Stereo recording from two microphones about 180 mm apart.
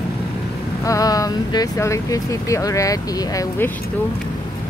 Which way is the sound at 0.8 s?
20° left (ahead or behind).